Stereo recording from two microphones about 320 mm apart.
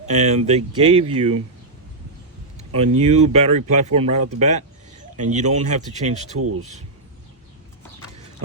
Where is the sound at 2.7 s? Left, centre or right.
Centre.